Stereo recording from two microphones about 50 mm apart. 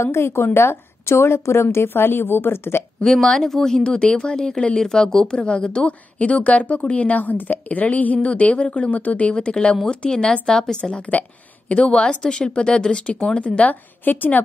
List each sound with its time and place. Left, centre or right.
0.0 s a woman's voice: left
3.0 s a woman's voice: centre
14.0 s a woman's voice: left